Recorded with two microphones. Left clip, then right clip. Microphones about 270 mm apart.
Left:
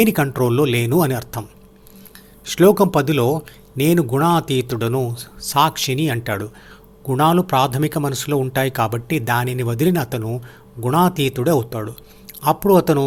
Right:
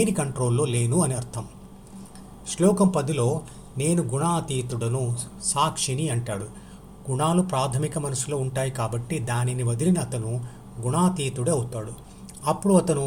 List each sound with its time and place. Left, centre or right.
0.0 s a man's voice: left